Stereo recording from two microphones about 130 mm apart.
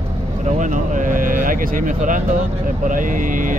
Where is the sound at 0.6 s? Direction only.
80° right.